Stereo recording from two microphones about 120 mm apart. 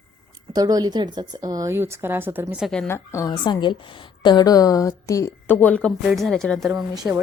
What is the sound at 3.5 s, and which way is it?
A woman's voice, 40° left (ahead or behind).